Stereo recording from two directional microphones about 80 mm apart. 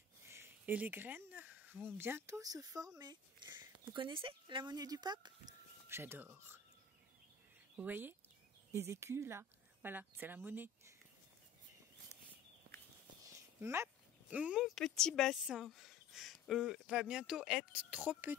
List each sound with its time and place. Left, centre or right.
0.3 s a sound: right
0.7 s speech: right
2.4 s speech: right
3.0 s speech: right
3.9 s speech: right
4.7 s speech: right
5.9 s speech: right
7.7 s speech: right
13.6 s speech: right
14.3 s speech: centre
14.6 s speech: centre
15.4 s speech: centre